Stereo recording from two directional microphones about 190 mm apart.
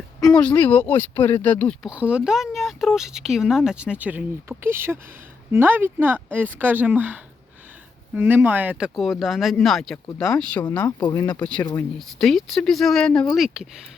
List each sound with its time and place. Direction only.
0.2 s speech: 5° left (ahead or behind)
1.9 s speech: 5° right (ahead or behind)
11.0 s speech: 20° left (ahead or behind)
11.4 s speech: 5° left (ahead or behind)